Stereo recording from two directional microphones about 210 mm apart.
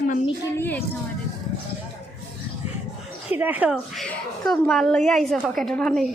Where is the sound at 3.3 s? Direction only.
10° right (ahead or behind).